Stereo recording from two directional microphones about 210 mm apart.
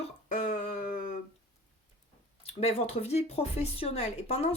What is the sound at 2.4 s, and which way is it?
A woman's voice, 30° left (ahead or behind).